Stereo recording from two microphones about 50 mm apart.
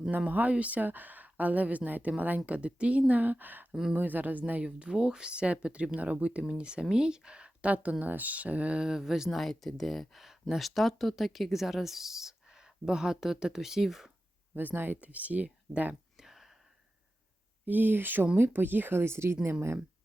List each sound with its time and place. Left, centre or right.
0.3 s a woman's voice: right
3.1 s a woman's voice: right
4.6 s speech: centre
8.8 s speech: centre
9.4 s speech: centre
14.5 s a woman's voice: right
16.1 s a sound: centre
17.7 s speech: right